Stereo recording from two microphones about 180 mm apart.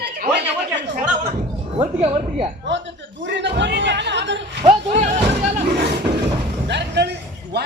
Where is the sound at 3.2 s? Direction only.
80° right.